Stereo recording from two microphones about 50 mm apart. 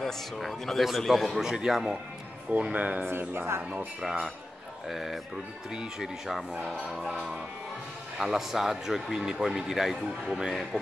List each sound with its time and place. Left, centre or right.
0.0 s a man's voice: centre
2.6 s speech: right
3.0 s a man's voice: right
4.0 s a man's voice: centre
5.7 s a man's voice: centre
8.2 s a man's voice: centre